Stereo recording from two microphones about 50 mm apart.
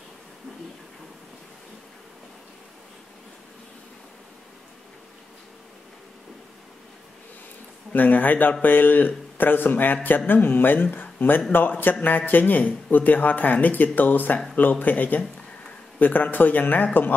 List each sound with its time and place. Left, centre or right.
7.9 s a man's voice: left